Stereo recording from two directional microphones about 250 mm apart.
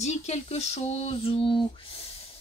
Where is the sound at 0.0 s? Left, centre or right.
Left.